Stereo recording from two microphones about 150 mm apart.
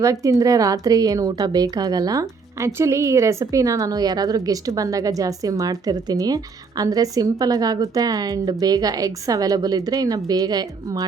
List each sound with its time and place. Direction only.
0.0 s a woman's voice: 20° right (ahead or behind)